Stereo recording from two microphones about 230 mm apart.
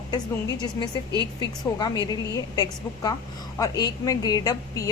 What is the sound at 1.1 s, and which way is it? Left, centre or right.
Speech, centre.